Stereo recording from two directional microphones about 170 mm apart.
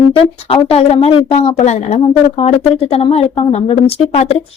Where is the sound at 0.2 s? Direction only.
35° left (ahead or behind).